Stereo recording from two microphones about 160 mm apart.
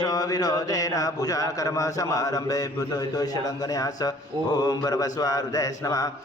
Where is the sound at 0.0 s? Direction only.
25° left (ahead or behind).